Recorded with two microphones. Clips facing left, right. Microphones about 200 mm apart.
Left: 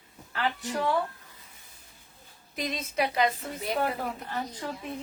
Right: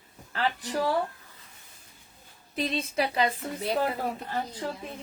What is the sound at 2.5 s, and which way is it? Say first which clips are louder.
Speech: right 3 dB; 30° right (ahead or behind).